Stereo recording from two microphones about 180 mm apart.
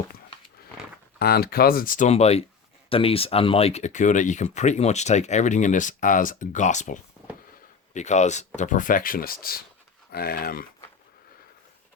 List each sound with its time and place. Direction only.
1.2 s speech: 60° left (ahead or behind)